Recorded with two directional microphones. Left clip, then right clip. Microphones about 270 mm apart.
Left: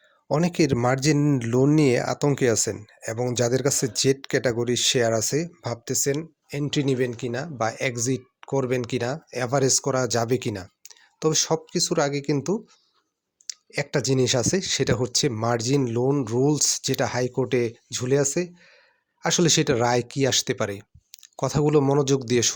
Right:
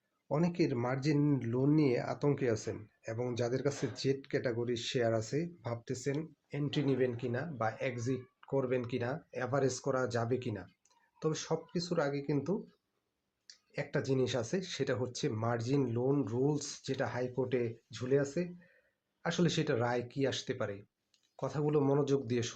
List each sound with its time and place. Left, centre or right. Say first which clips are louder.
0.3 s speech: left 11 dB; left